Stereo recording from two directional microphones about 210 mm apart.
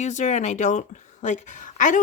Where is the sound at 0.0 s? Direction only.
35° left (ahead or behind).